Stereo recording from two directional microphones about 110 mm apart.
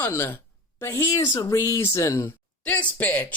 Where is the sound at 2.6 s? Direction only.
15° left (ahead or behind).